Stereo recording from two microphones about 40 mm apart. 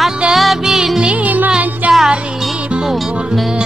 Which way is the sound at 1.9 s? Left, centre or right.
Right.